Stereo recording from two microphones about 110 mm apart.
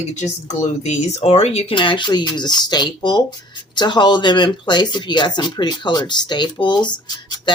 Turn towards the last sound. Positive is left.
turn(degrees=40)  # may be behind; listen again after turning